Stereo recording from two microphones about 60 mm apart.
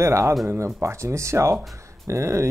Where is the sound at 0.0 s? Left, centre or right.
Right.